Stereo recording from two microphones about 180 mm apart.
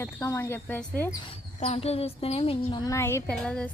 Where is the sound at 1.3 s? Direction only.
35° left (ahead or behind).